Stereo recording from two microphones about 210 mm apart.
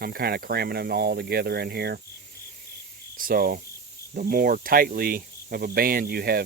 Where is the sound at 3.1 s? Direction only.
45° right (ahead or behind).